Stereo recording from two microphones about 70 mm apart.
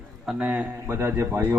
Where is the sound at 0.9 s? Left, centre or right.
Right.